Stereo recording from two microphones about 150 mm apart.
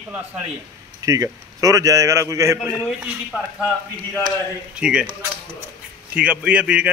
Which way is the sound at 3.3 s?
10° right (ahead or behind).